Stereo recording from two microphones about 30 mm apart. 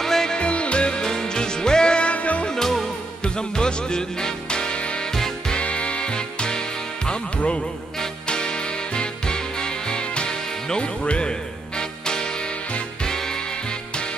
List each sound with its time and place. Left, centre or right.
0.0 s music: centre
0.3 s music: left
1.0 s music: left
2.1 s music: left
2.5 s music: centre
3.3 s music: left
7.3 s music: left
8.3 s music: left